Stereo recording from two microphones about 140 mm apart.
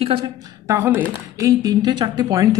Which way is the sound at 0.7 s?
15° right (ahead or behind).